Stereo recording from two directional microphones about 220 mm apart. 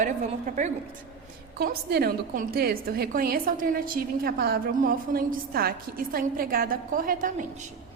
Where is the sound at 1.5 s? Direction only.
45° right (ahead or behind).